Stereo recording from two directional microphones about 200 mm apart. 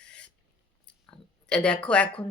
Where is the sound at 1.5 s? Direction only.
5° left (ahead or behind).